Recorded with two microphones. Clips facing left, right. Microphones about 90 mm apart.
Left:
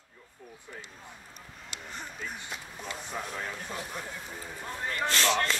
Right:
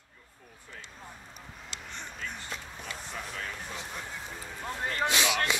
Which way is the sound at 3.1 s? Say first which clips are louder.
Left 3 dB; 10° left (ahead or behind).